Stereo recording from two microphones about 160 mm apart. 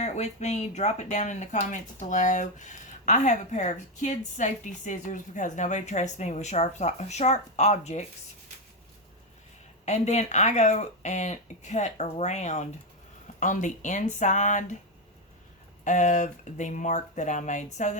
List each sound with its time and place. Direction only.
0.0 s speech: 45° left (ahead or behind)
9.8 s speech: 45° left (ahead or behind)
15.8 s speech: 50° left (ahead or behind)